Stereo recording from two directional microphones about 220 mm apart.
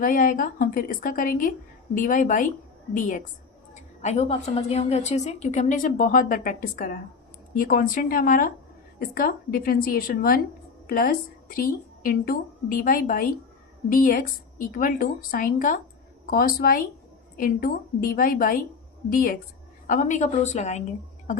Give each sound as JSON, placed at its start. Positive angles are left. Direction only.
{"t": 0.0, "sound": "a woman's voice", "side_deg": 35}